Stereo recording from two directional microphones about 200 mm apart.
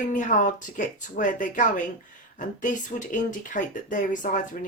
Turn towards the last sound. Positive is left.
turn(degrees=40)  # may be behind; listen again after turning